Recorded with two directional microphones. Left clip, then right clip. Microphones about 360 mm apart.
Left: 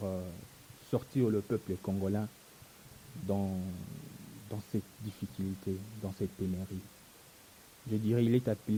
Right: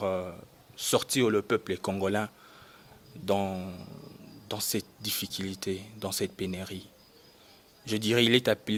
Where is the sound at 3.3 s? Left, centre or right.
Right.